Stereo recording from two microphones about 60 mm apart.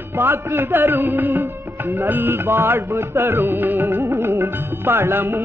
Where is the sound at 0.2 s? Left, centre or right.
Right.